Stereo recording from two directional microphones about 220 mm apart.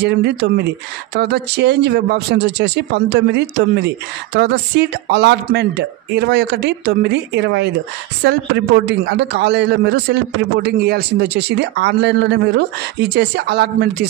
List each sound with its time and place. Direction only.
0.0 s speech: 50° right (ahead or behind)